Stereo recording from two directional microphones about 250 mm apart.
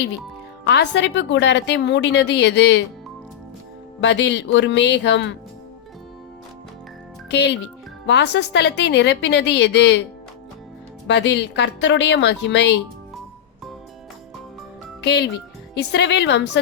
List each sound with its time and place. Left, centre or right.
0.6 s a woman's voice: left
4.0 s a woman's voice: left
7.3 s a woman's voice: left
11.1 s a woman's voice: left
15.0 s a child's voice: left